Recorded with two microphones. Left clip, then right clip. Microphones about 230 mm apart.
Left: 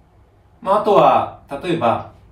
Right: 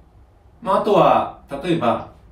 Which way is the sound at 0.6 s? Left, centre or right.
Centre.